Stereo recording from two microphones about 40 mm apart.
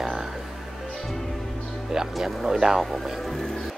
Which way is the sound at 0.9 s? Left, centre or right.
Centre.